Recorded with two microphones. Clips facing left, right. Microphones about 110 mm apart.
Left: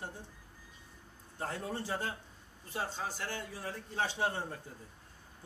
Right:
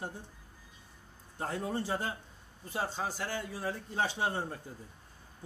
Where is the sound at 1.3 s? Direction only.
15° right (ahead or behind).